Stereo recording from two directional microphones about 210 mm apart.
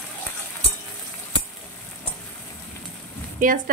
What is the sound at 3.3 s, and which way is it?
Speech, 40° right (ahead or behind).